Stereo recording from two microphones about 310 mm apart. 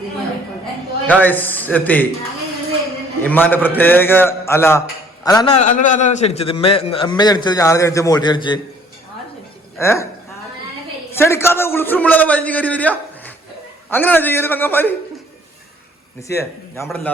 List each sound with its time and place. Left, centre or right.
1.0 s a man's voice: centre
3.2 s a man's voice: centre
9.7 s a man's voice: centre
11.1 s a man's voice: centre
16.2 s a man's voice: centre